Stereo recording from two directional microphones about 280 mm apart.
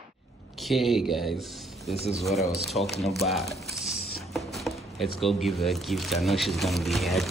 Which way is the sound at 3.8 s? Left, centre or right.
Centre.